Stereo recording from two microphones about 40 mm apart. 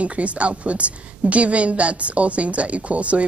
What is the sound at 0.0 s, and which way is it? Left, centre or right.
A woman's voice, right.